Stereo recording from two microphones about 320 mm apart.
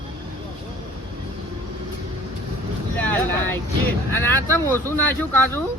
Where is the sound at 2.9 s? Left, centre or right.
Centre.